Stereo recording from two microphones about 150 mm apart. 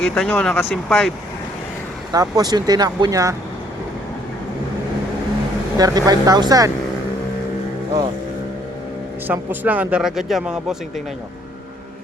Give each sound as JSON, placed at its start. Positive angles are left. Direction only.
{"t": 0.0, "sound": "speech", "side_deg": 10}
{"t": 2.1, "sound": "speech", "side_deg": -25}
{"t": 5.7, "sound": "speech", "side_deg": -25}
{"t": 9.2, "sound": "speech", "side_deg": -10}